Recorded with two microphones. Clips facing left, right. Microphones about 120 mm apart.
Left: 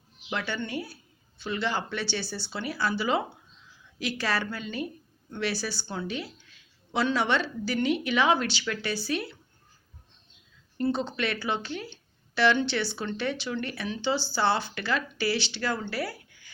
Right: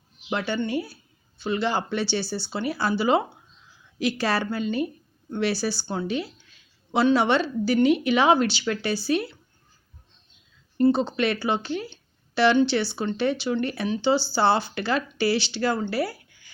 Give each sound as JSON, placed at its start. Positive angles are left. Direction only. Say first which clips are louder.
{"t": 0.3, "sound": "a woman's voice", "louder": "right 6 dB", "side_deg": -30}
{"t": 4.6, "sound": "a woman's voice", "louder": "right 8 dB", "side_deg": -20}
{"t": 5.3, "sound": "a woman's voice", "louder": "right 6 dB", "side_deg": -35}
{"t": 10.8, "sound": "speech", "louder": "right 7 dB", "side_deg": -30}